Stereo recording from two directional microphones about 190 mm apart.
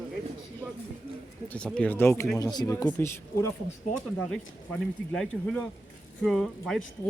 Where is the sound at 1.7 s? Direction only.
5° left (ahead or behind).